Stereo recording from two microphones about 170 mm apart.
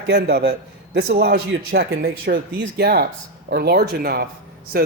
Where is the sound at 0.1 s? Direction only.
70° right (ahead or behind).